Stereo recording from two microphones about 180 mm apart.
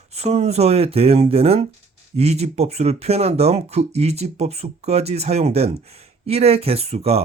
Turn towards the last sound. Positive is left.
turn(degrees=-35)  # may be behind; listen again after turning